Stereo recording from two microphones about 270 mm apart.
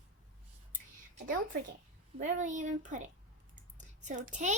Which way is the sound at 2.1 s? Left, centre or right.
Right.